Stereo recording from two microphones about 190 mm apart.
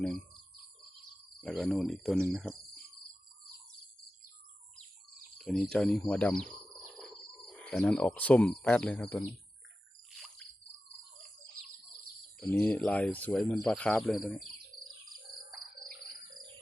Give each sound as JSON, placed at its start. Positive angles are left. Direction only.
{"t": 1.4, "sound": "speech", "side_deg": 0}
{"t": 2.5, "sound": "cricket", "side_deg": -25}
{"t": 5.4, "sound": "speech", "side_deg": 0}
{"t": 10.2, "sound": "a sound", "side_deg": 5}
{"t": 12.5, "sound": "speech", "side_deg": 5}